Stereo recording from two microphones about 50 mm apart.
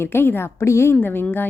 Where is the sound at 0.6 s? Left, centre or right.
Left.